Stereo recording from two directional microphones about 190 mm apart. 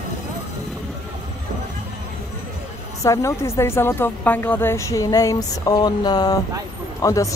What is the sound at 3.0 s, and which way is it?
A woman's voice, 15° left (ahead or behind).